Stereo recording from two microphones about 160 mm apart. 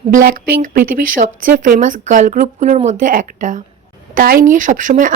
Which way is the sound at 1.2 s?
55° right (ahead or behind).